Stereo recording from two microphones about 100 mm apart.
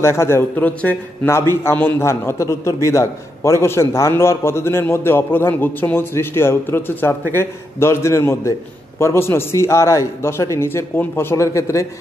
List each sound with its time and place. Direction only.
0.0 s a man's voice: 30° left (ahead or behind)